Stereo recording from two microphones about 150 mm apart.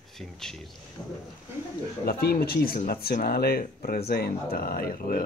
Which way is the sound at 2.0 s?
90° left.